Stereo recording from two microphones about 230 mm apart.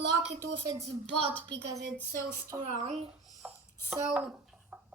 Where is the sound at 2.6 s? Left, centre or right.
Right.